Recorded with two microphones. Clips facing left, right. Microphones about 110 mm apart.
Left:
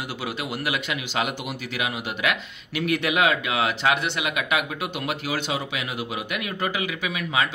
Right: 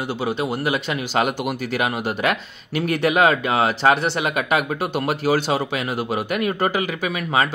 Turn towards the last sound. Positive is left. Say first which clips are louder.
# right 4 dB
turn(degrees=-45)  # may be behind; listen again after turning